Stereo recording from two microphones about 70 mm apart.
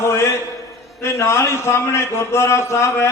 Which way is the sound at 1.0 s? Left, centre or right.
Left.